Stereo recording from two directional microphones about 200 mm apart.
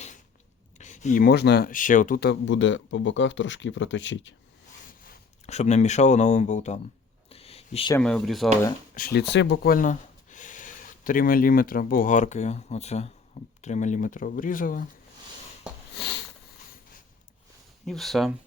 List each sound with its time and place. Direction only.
0.8 s speech: 35° left (ahead or behind); by 4.4 s 70° left (ahead or behind)
4.9 s speech: 45° left (ahead or behind)
7.3 s a sound: 30° left (ahead or behind)
7.9 s speech: 5° left (ahead or behind)
9.0 s speech: 50° left (ahead or behind)
16.0 s sniff: 60° left (ahead or behind)
17.8 s speech: centre (ahead or behind)